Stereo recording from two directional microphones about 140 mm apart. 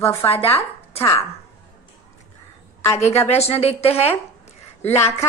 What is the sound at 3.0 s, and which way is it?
A woman's voice, 50° left (ahead or behind).